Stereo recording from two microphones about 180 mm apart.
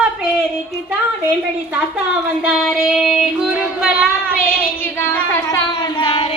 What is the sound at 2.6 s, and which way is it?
Music, centre (ahead or behind).